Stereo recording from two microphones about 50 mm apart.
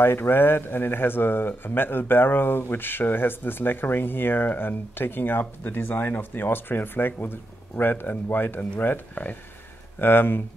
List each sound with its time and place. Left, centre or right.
0.0 s speech: left